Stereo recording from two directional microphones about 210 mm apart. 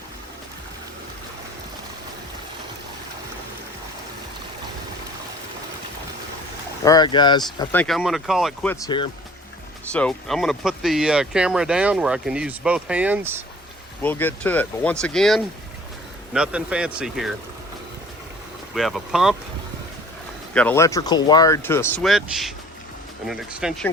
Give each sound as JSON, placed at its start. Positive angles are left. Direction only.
{"t": 6.8, "sound": "speech", "side_deg": 20}
{"t": 7.7, "sound": "speech", "side_deg": 5}
{"t": 8.7, "sound": "speech", "side_deg": 20}
{"t": 9.9, "sound": "speech", "side_deg": 5}
{"t": 14.0, "sound": "speech", "side_deg": 10}
{"t": 18.7, "sound": "speech", "side_deg": 0}
{"t": 20.5, "sound": "speech", "side_deg": 5}
{"t": 22.0, "sound": "speech", "side_deg": 0}